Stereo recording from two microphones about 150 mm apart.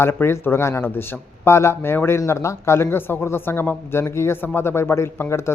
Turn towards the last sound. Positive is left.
turn(degrees=20)  # may be behind; listen again after turning